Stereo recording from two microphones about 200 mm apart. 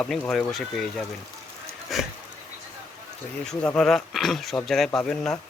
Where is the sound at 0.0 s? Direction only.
5° left (ahead or behind).